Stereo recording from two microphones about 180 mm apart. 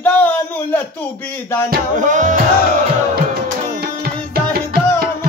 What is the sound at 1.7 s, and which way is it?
Music, 45° right (ahead or behind).